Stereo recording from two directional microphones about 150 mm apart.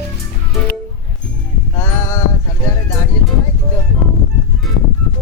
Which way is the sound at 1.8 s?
20° left (ahead or behind).